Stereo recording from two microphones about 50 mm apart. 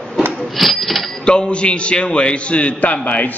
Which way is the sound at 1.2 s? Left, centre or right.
Centre.